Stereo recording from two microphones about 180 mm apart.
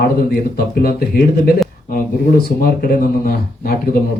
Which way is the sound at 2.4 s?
55° left (ahead or behind).